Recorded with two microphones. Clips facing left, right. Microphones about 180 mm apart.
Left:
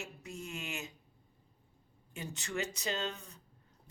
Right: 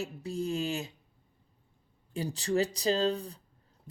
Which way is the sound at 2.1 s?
35° right (ahead or behind).